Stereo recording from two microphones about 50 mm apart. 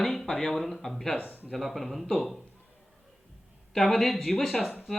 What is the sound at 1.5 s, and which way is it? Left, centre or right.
Speech, centre.